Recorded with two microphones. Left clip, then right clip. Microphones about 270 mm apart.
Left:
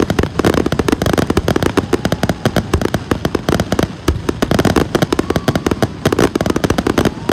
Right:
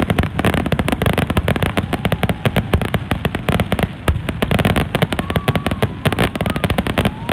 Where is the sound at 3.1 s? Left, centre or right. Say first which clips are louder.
Left 4 dB; centre.